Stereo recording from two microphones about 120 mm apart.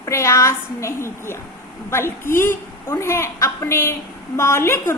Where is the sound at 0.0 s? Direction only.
25° left (ahead or behind).